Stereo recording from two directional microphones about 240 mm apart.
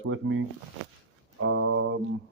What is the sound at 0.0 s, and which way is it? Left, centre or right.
Speech, right.